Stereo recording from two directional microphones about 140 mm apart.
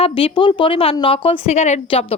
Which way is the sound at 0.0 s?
40° left (ahead or behind).